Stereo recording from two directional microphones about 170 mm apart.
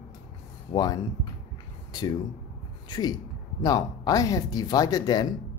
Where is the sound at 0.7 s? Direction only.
25° left (ahead or behind).